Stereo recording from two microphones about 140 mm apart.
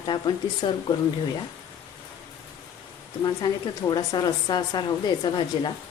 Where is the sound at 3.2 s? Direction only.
30° left (ahead or behind).